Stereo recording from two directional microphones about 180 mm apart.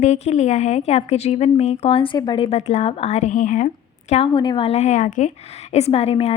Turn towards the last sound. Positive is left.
turn(degrees=35)  # may be behind; listen again after turning